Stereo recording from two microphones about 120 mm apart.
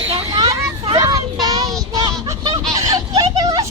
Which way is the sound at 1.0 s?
30° right (ahead or behind).